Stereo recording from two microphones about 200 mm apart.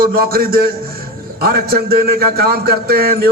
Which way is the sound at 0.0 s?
50° right (ahead or behind).